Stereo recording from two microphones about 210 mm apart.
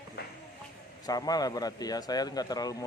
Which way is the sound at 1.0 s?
20° left (ahead or behind).